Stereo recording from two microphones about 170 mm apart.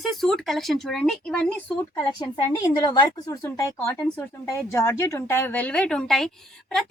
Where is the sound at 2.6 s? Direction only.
25° left (ahead or behind).